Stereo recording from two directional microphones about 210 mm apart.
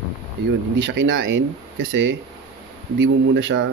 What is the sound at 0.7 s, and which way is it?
Speech, 60° right (ahead or behind).